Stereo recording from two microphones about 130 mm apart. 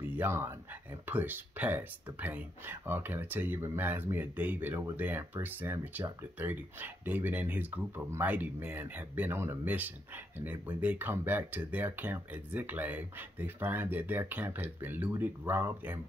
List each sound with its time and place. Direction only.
0.1 s speech: 15° right (ahead or behind)